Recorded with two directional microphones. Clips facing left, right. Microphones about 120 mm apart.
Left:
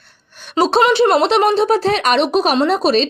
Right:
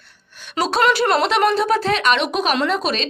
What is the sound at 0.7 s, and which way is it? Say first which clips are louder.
Speech: left 4 dB; 25° left (ahead or behind).